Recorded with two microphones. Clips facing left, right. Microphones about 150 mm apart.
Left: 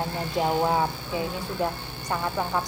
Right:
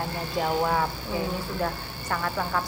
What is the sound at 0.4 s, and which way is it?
Speech, 20° left (ahead or behind).